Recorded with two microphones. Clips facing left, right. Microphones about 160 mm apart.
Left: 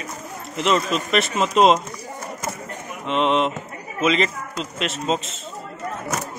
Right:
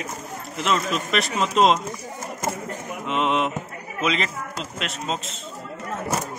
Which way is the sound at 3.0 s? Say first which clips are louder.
Left 3 dB; 5° right (ahead or behind).